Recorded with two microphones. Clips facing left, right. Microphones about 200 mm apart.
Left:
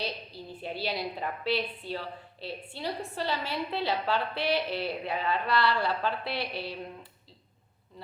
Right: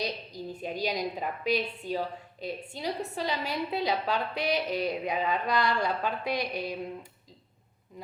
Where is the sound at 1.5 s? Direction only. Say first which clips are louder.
Right 2 dB; 45° right (ahead or behind).